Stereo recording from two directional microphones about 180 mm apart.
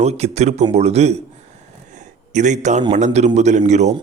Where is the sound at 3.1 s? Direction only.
40° right (ahead or behind).